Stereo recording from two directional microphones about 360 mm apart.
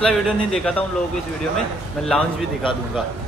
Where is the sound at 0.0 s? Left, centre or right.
Centre.